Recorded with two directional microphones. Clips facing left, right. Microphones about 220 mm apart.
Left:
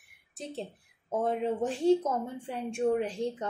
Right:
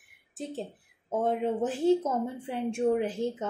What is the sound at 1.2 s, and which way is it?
A woman's voice, 5° right (ahead or behind).